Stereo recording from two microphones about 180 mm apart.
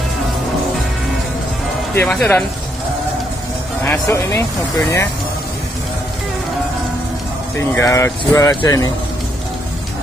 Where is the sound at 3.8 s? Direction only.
15° left (ahead or behind).